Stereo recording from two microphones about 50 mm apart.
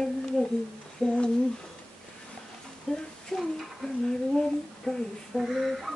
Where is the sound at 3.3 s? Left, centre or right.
Centre.